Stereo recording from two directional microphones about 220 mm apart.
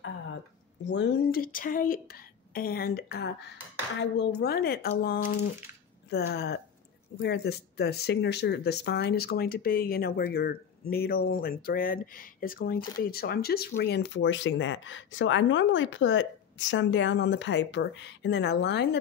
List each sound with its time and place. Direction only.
0.8 s speech: 50° left (ahead or behind)